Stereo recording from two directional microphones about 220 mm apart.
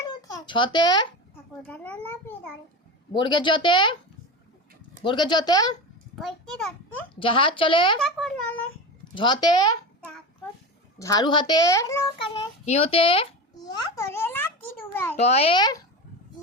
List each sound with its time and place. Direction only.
0.0 s a sound: 15° left (ahead or behind)
1.6 s a child's voice: 5° left (ahead or behind)
3.1 s a woman's voice: 20° left (ahead or behind)
5.0 s a woman's voice: 20° left (ahead or behind)
6.1 s a child's voice: centre (ahead or behind)
7.2 s a woman's voice: 25° left (ahead or behind)
7.9 s a child's voice: centre (ahead or behind)
9.1 s a woman's voice: 20° left (ahead or behind)
11.0 s a child's voice: 20° left (ahead or behind)
15.1 s a woman's voice: 30° left (ahead or behind)